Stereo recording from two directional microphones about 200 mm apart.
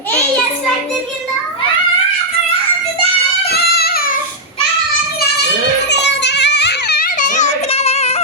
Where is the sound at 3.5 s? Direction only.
50° left (ahead or behind).